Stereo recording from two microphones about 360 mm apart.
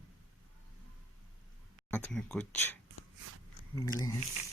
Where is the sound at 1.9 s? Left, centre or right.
Centre.